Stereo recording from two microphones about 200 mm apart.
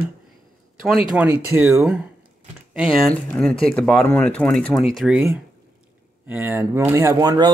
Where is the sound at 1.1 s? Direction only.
10° right (ahead or behind).